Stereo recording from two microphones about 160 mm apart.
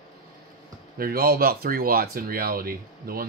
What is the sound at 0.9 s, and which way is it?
Speech, 70° right (ahead or behind).